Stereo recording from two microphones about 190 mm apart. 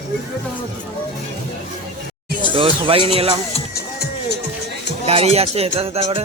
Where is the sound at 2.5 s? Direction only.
30° right (ahead or behind).